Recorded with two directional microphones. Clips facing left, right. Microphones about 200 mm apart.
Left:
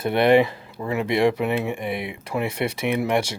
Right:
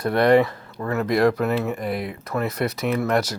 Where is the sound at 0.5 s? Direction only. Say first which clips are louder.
Right 1 dB; 5° left (ahead or behind).